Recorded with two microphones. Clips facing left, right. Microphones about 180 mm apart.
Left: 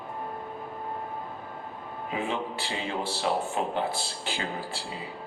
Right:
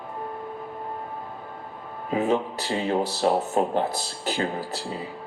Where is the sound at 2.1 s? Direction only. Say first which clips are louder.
Right 8 dB; 40° right (ahead or behind).